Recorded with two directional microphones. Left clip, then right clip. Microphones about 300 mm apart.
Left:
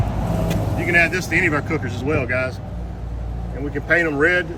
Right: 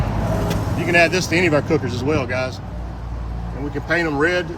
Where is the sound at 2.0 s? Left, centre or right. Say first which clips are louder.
Left 2 dB; centre.